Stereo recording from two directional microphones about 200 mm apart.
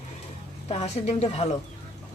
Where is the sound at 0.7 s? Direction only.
35° left (ahead or behind).